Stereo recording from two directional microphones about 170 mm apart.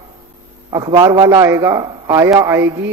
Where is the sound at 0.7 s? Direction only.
25° right (ahead or behind).